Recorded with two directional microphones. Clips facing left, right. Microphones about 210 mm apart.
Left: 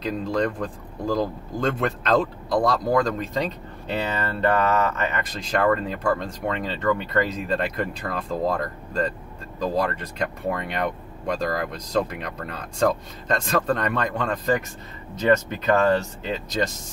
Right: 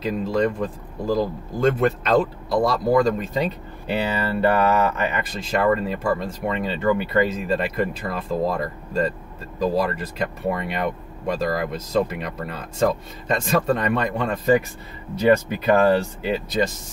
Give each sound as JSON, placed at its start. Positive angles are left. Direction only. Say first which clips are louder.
{"t": 0.0, "sound": "speech", "louder": "right 3 dB", "side_deg": -5}